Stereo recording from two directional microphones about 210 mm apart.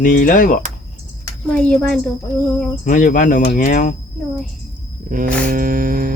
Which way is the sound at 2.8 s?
40° left (ahead or behind).